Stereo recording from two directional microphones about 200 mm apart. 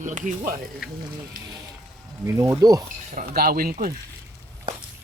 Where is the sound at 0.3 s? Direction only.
45° right (ahead or behind).